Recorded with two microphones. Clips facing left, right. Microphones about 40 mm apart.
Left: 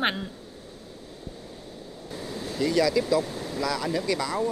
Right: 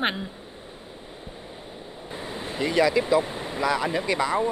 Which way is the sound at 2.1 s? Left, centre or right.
Right.